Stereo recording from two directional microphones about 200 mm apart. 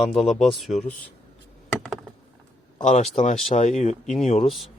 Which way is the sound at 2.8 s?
35° left (ahead or behind).